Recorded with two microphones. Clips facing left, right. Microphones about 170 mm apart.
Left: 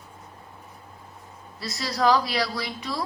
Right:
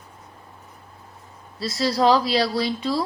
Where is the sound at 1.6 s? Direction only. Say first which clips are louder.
Right 5 dB; 30° right (ahead or behind).